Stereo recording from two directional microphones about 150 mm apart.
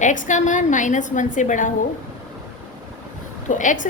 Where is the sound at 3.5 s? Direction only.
60° left (ahead or behind).